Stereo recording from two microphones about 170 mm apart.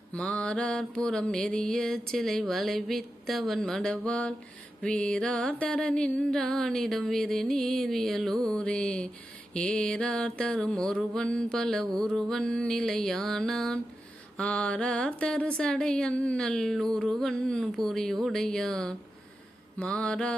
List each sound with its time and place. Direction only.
0.1 s mantra: 5° left (ahead or behind)